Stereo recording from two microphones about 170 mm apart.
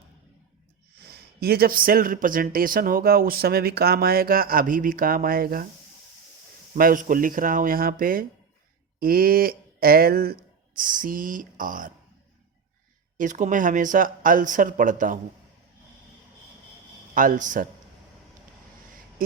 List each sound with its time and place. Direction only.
1.0 s speech: 65° right (ahead or behind)
6.7 s speech: 55° right (ahead or behind)
11.0 s speech: 55° right (ahead or behind)
13.1 s speech: 45° right (ahead or behind)
17.2 s speech: 50° right (ahead or behind)